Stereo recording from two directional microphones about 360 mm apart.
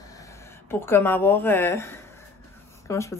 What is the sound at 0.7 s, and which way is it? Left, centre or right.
Speech, centre.